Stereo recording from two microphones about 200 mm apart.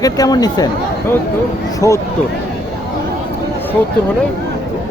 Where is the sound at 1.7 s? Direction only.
15° left (ahead or behind).